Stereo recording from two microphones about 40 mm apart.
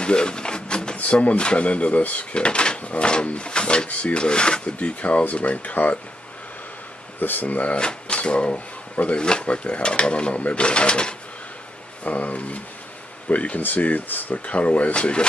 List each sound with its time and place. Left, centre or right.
0.0 s a sound: left
1.4 s speech: left
2.4 s speech: left
7.2 s speech: left
7.8 s speech: left
12.0 s speech: left